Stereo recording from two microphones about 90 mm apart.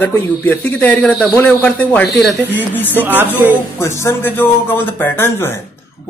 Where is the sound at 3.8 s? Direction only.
30° left (ahead or behind).